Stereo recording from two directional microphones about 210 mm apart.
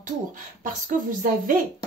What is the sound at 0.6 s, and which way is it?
Speech, 40° right (ahead or behind).